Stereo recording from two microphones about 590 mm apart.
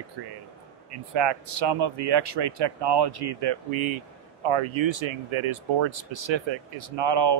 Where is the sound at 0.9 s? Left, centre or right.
Right.